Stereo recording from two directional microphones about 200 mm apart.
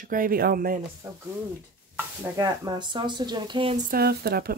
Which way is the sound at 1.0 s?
15° right (ahead or behind).